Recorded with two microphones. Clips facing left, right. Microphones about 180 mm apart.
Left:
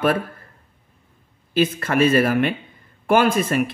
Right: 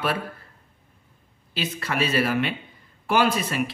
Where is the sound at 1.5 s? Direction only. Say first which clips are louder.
Left 9 dB; 50° left (ahead or behind).